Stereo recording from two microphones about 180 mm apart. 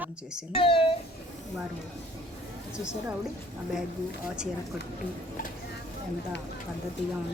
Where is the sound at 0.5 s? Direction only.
30° left (ahead or behind).